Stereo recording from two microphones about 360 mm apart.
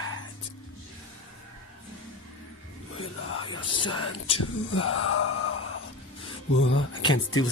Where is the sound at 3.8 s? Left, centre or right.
Left.